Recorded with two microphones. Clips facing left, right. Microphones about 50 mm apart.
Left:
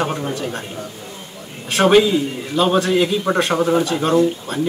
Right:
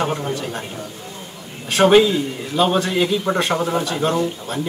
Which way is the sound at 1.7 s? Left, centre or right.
Centre.